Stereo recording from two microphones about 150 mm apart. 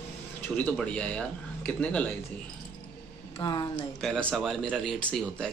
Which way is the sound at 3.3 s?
30° left (ahead or behind).